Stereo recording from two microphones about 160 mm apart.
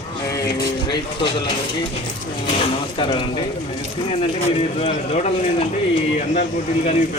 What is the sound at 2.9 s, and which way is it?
Speech, 30° left (ahead or behind).